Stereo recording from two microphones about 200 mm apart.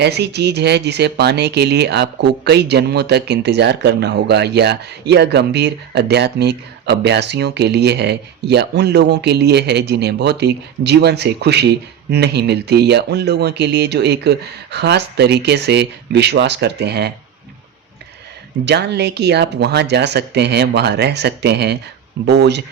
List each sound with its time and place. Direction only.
0.0 s speech: 55° right (ahead or behind)
18.6 s speech: 55° right (ahead or behind)